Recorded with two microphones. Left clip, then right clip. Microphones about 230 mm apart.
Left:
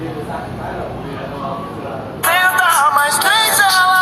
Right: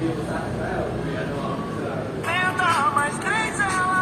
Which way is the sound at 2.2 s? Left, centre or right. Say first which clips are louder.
Left 10 dB; left.